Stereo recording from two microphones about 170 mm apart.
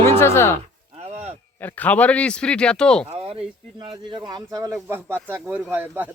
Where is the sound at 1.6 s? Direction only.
10° left (ahead or behind).